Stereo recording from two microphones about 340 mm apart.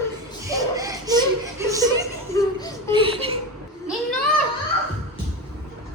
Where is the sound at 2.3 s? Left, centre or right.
Centre.